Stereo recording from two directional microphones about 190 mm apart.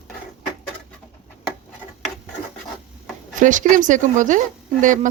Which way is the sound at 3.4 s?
40° right (ahead or behind).